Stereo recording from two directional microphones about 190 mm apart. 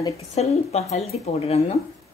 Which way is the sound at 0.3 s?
35° left (ahead or behind).